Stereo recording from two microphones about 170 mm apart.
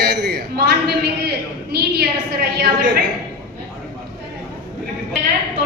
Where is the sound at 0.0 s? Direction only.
75° right (ahead or behind).